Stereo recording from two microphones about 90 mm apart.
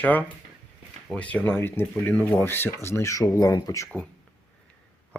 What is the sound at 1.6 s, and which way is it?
Speech, 25° left (ahead or behind).